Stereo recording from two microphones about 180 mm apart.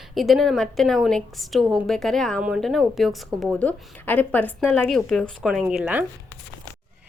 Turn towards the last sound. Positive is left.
turn(degrees=-10)  # may be behind; listen again after turning